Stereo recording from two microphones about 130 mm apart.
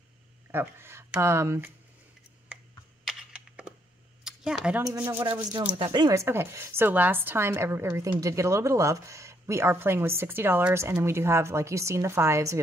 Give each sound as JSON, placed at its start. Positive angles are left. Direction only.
{"t": 0.5, "sound": "a woman's voice", "side_deg": -15}
{"t": 3.1, "sound": "computer keyboard", "side_deg": -5}
{"t": 4.2, "sound": "a sound", "side_deg": -5}
{"t": 4.9, "sound": "speech", "side_deg": -15}
{"t": 5.2, "sound": "speech", "side_deg": -35}
{"t": 6.1, "sound": "a woman's voice", "side_deg": -20}